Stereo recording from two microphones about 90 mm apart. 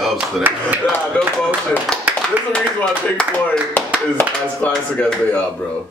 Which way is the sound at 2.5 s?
10° left (ahead or behind).